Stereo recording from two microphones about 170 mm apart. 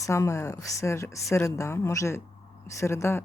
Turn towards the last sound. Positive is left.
turn(degrees=15)  # may be behind; listen again after turning